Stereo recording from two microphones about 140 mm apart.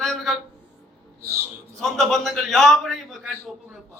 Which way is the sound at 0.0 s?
Centre (ahead or behind).